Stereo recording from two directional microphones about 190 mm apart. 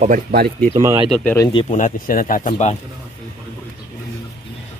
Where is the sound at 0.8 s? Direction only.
20° right (ahead or behind).